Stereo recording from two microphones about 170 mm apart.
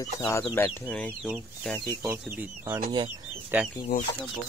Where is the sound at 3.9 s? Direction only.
60° left (ahead or behind).